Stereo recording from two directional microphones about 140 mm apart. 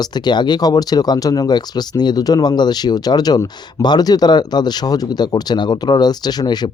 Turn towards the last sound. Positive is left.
turn(degrees=30)  # may be behind; listen again after turning